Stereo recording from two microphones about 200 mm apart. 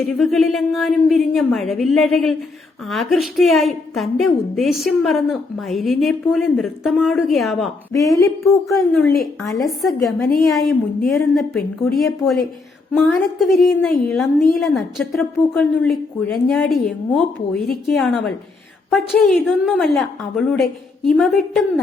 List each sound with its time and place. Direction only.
0.2 s a woman's voice: centre (ahead or behind)
7.9 s speech: 15° left (ahead or behind)
8.7 s a woman's voice: 5° left (ahead or behind)